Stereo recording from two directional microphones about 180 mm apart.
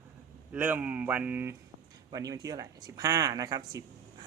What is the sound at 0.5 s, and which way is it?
Speech, 10° right (ahead or behind).